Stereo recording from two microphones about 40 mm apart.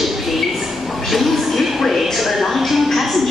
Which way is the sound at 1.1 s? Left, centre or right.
Centre.